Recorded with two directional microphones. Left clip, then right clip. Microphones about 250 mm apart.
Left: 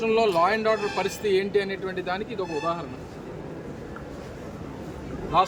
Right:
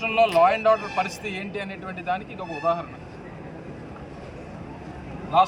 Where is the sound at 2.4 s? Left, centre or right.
Centre.